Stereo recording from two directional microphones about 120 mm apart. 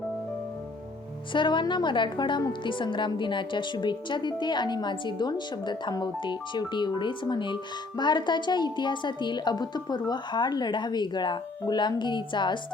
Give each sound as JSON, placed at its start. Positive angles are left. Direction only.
{"t": 1.3, "sound": "a woman's voice", "side_deg": 40}